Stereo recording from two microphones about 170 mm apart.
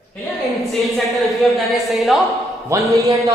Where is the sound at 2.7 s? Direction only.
20° right (ahead or behind).